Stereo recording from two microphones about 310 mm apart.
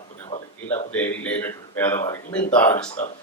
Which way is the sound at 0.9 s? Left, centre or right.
Centre.